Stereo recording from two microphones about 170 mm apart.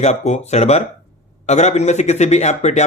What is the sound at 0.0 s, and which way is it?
A man's voice, 40° left (ahead or behind).